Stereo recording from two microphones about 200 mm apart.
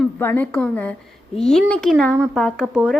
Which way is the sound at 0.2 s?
10° left (ahead or behind).